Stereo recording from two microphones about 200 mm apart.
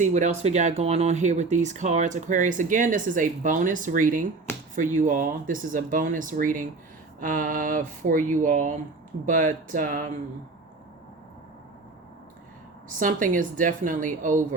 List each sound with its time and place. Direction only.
0.0 s speech: 35° right (ahead or behind)
12.9 s speech: 40° right (ahead or behind)